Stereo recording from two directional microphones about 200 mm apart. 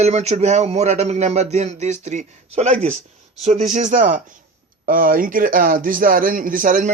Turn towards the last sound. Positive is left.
turn(degrees=-45)  # may be behind; listen again after turning